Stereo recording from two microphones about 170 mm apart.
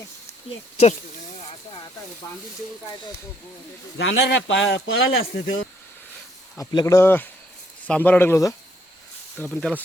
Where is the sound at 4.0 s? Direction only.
90° left.